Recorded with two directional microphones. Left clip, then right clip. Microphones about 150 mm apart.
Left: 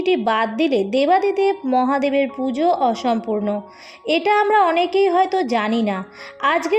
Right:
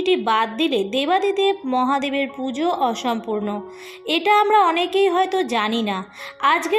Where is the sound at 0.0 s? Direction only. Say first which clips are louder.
Even; 45° left (ahead or behind).